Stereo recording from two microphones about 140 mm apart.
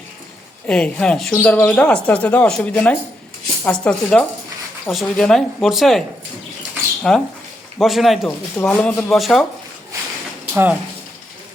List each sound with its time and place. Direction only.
0.7 s speech: 5° left (ahead or behind)
7.1 s speech: centre (ahead or behind)
8.5 s speech: 10° left (ahead or behind)
10.5 s speech: 15° right (ahead or behind)